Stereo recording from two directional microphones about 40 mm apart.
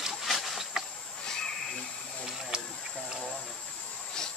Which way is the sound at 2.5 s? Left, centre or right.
Centre.